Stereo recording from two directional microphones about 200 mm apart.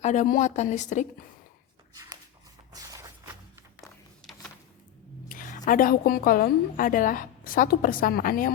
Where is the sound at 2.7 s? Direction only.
15° right (ahead or behind).